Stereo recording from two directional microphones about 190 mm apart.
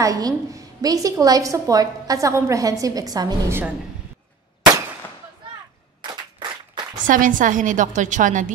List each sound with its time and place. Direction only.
0.0 s a woman's voice: 20° right (ahead or behind)
7.1 s a woman's voice: 45° right (ahead or behind)